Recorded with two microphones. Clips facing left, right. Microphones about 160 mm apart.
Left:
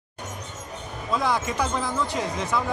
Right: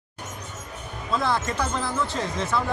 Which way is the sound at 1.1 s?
15° left (ahead or behind).